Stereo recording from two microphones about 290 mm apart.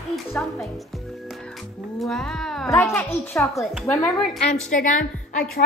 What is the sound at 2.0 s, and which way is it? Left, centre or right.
A woman's voice, centre.